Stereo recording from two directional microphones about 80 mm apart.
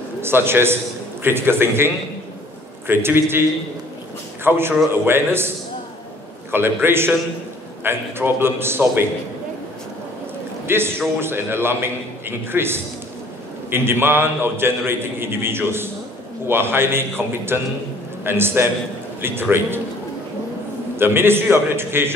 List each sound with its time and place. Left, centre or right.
0.2 s a man's voice: right
2.9 s a man's voice: right
4.5 s a man's voice: right
6.5 s a man's voice: right
10.7 s a man's voice: right
20.9 s a man's voice: right